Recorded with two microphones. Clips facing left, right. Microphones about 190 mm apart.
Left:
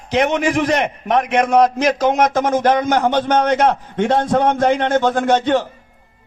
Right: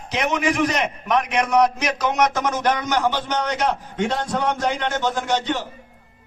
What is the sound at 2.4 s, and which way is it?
A man's voice, 50° left (ahead or behind).